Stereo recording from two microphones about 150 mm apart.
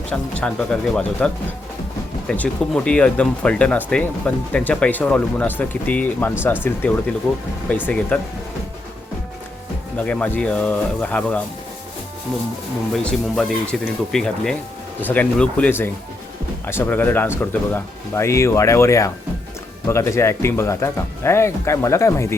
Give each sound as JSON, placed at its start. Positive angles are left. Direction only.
{"t": 0.1, "sound": "speech", "side_deg": 5}
{"t": 10.1, "sound": "speech", "side_deg": 10}
{"t": 12.9, "sound": "speech", "side_deg": 0}